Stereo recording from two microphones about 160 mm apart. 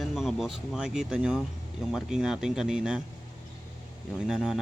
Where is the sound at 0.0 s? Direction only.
Centre (ahead or behind).